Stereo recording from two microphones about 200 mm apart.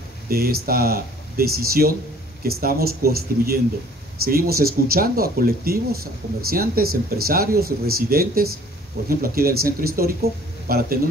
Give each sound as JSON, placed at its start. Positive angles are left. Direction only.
{"t": 0.3, "sound": "speech", "side_deg": -50}